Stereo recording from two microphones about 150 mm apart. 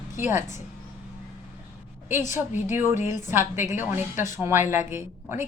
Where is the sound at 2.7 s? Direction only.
15° right (ahead or behind).